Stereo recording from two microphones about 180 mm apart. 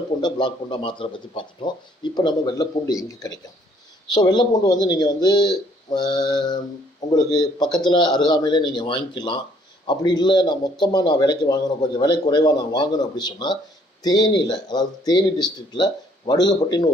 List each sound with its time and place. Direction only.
0.2 s a man's voice: 25° left (ahead or behind)